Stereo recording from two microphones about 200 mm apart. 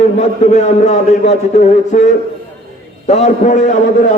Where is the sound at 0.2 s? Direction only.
35° left (ahead or behind).